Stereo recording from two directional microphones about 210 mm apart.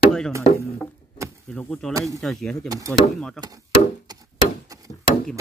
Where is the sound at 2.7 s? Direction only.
15° right (ahead or behind).